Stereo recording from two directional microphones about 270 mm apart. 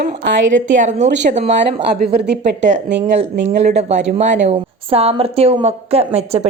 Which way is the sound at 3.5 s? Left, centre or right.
Right.